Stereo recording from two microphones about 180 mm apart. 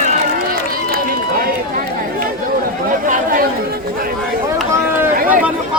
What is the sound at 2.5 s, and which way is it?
Chatter, 50° right (ahead or behind).